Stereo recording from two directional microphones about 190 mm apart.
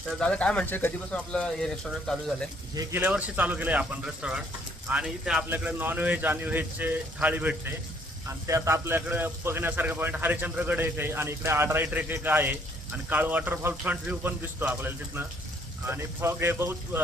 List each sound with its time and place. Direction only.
0.1 s speech: 5° left (ahead or behind)
2.7 s a man's voice: 10° right (ahead or behind)